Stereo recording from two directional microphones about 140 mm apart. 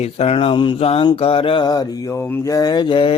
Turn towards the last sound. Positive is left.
turn(degrees=35)  # may be behind; listen again after turning